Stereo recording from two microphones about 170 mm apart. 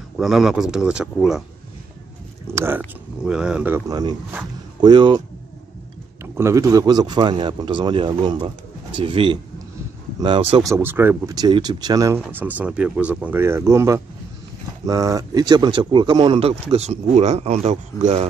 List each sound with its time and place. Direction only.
0.2 s a man's voice: centre (ahead or behind)
2.4 s a man's voice: 15° right (ahead or behind)
3.9 s speech: 25° right (ahead or behind)
6.3 s speech: 15° right (ahead or behind)
10.7 s speech: 15° right (ahead or behind); by 18.3 s 40° right (ahead or behind)